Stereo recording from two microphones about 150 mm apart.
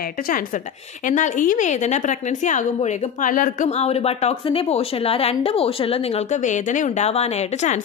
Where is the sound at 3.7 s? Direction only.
45° left (ahead or behind).